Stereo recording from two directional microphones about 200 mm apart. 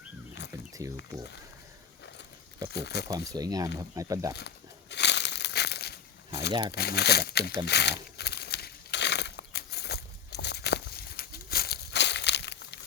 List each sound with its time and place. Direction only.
0.8 s speech: 15° right (ahead or behind)
2.7 s speech: 55° left (ahead or behind)
3.1 s speech: 20° right (ahead or behind)
4.4 s crumpling: 60° left (ahead or behind)
6.5 s speech: 25° right (ahead or behind)
6.7 s speech: 55° left (ahead or behind)
8.2 s a sound: 55° left (ahead or behind)